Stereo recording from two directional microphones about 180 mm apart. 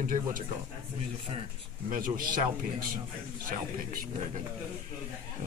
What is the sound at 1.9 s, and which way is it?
Speech, 50° right (ahead or behind).